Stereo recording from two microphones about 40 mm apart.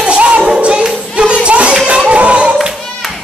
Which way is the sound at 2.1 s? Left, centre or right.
Right.